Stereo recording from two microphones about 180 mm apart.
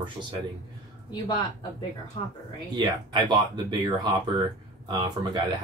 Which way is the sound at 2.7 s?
25° right (ahead or behind).